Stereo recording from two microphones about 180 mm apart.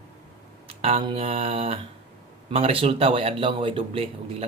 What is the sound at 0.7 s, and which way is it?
Speech, 35° right (ahead or behind).